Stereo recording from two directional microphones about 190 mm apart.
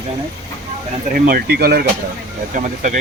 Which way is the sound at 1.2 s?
55° right (ahead or behind).